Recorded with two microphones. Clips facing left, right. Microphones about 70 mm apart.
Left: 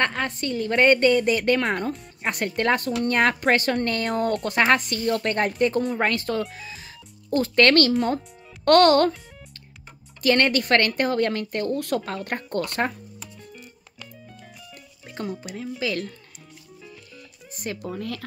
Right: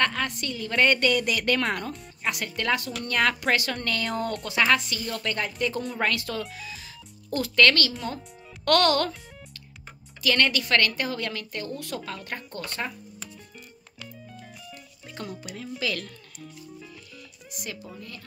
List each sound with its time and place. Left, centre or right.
0.0 s a woman's voice: left
1.9 s a woman's voice: left
10.2 s speech: left
15.0 s music: left
15.8 s a woman's voice: left
17.5 s speech: left
17.9 s speech: left